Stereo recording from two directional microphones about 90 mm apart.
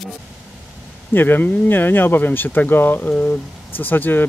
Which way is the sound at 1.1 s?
20° left (ahead or behind).